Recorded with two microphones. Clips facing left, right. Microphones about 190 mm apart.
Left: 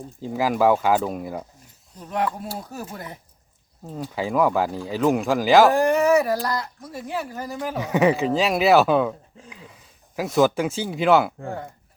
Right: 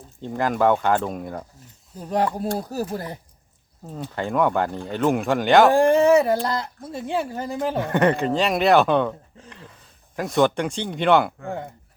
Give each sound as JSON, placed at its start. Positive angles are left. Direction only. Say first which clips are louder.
{"t": 0.2, "sound": "speech", "louder": "left 1 dB", "side_deg": 5}
{"t": 2.0, "sound": "speech", "louder": "right 3 dB", "side_deg": -35}
{"t": 3.8, "sound": "speech", "louder": "left 1 dB", "side_deg": 5}
{"t": 5.7, "sound": "speech", "louder": "right 3 dB", "side_deg": -30}
{"t": 7.8, "sound": "speech", "louder": "left 1 dB", "side_deg": 0}